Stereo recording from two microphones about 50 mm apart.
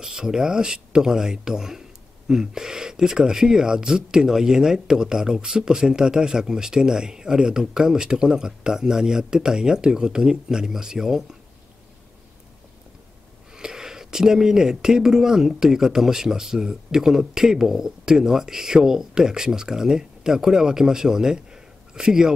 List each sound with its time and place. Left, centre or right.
0.0 s speech: centre
13.5 s speech: centre